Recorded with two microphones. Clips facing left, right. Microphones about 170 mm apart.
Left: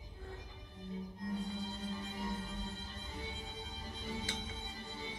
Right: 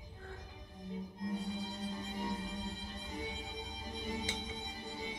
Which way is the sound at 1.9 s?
15° right (ahead or behind).